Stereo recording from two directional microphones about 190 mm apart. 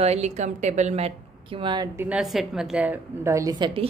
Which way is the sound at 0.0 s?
35° right (ahead or behind).